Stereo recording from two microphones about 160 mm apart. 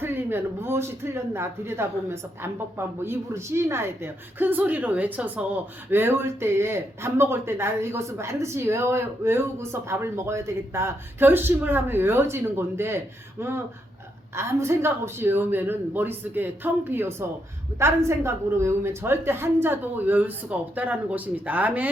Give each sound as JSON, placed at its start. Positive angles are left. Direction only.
{"t": 0.0, "sound": "speech", "side_deg": -15}
{"t": 14.3, "sound": "speech", "side_deg": -15}